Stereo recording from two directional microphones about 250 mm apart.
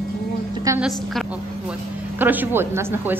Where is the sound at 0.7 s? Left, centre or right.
Centre.